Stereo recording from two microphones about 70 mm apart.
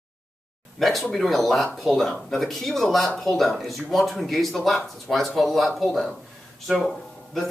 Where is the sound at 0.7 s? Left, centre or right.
Centre.